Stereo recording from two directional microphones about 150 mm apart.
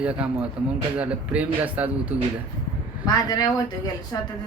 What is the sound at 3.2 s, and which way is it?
Speech, 25° left (ahead or behind).